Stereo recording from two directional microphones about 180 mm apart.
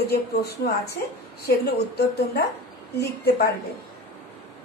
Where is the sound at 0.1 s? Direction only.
65° left (ahead or behind).